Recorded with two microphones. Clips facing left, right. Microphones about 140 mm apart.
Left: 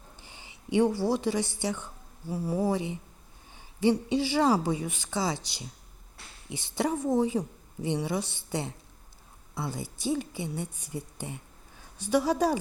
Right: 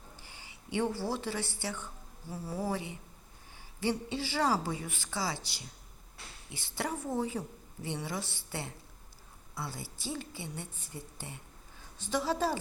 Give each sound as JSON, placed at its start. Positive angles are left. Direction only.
{"t": 0.2, "sound": "a woman's voice", "side_deg": 20}